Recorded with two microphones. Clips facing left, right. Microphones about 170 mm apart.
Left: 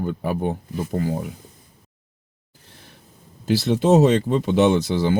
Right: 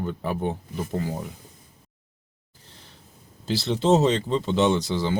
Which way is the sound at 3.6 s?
15° left (ahead or behind).